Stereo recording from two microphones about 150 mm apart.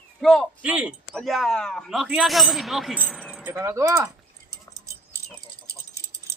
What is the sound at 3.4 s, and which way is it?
Speech, 15° right (ahead or behind).